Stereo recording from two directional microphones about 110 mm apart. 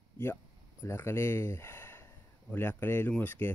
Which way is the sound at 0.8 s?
20° left (ahead or behind).